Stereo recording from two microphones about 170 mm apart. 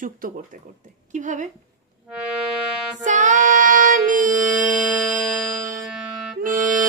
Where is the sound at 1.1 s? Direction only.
45° right (ahead or behind).